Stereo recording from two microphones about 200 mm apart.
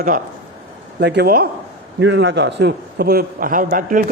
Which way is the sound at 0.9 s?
55° right (ahead or behind).